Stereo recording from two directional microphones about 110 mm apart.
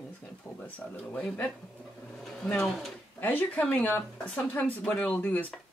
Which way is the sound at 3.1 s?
15° left (ahead or behind).